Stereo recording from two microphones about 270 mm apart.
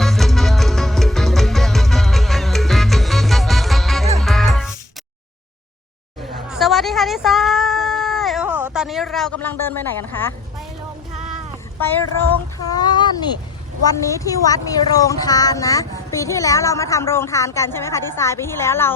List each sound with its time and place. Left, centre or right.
0.0 s music: centre
6.3 s a sound: centre
12.5 s a woman's voice: centre